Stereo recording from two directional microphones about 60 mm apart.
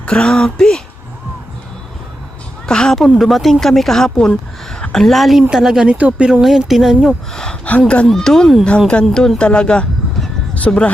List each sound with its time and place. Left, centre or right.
0.0 s speech: centre
2.6 s speech: centre
3.0 s speech: centre
5.9 s speech: right
6.4 s speech: centre
7.6 s speech: left
8.0 s speech: centre